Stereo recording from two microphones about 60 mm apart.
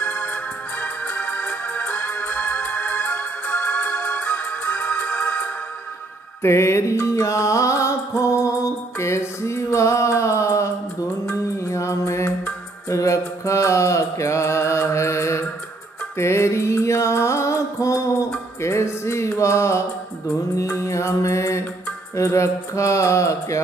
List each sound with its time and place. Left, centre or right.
0.0 s music: left
6.4 s music: left
12.8 s mantra: left
16.2 s music: left
20.5 s mantra: left